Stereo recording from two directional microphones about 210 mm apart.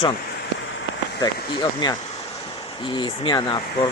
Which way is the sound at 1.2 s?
20° left (ahead or behind).